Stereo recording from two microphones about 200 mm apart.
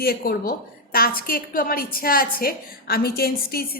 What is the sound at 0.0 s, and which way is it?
A woman's voice, 50° left (ahead or behind).